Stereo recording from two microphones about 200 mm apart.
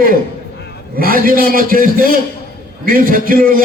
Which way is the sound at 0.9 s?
45° right (ahead or behind).